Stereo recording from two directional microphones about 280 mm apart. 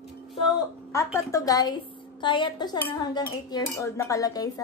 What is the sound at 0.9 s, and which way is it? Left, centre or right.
Dishes, centre.